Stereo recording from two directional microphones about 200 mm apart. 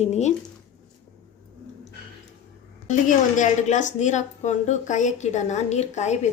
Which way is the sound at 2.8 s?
40° left (ahead or behind).